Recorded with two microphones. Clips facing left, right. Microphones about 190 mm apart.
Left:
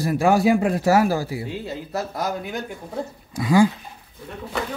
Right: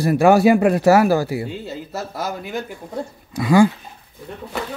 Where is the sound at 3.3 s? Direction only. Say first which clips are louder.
Right 3 dB; 60° right (ahead or behind).